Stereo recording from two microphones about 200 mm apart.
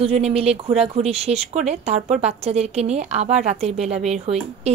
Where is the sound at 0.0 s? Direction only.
30° right (ahead or behind).